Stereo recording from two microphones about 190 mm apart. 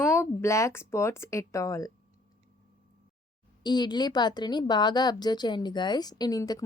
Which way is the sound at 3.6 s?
20° left (ahead or behind).